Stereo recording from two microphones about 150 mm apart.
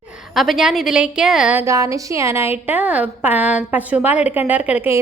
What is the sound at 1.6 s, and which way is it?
A woman's voice, 20° right (ahead or behind).